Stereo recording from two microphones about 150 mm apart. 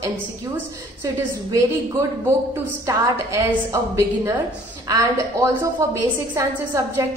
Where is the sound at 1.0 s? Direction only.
20° right (ahead or behind).